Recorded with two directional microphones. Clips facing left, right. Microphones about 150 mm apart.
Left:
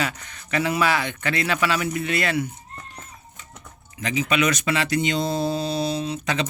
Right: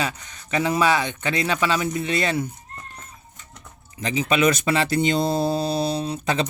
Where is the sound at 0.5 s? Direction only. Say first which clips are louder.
Right 2 dB; 20° right (ahead or behind).